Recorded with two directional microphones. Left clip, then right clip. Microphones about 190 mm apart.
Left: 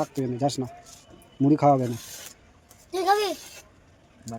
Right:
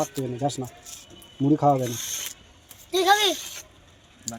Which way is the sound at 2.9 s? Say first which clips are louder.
Right 3 dB; 10° left (ahead or behind).